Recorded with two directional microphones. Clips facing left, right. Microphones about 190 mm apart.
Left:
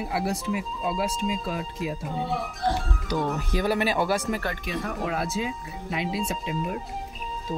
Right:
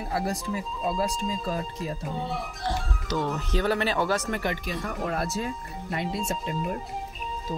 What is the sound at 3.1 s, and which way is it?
Speech, 15° left (ahead or behind).